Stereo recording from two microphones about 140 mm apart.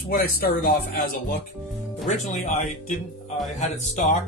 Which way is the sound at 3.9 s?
55° left (ahead or behind).